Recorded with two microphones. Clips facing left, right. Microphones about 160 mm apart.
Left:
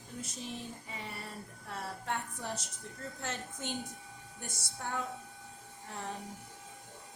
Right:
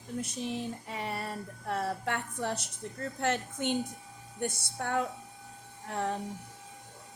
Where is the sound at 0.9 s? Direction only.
65° right (ahead or behind).